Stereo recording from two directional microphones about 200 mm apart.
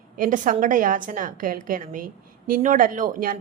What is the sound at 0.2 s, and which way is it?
A woman's voice, 40° right (ahead or behind).